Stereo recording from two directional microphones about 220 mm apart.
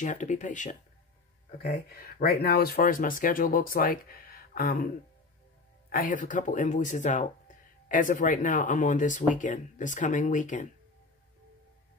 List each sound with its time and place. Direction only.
0.0 s speech: 35° left (ahead or behind)
5.9 s speech: 40° left (ahead or behind)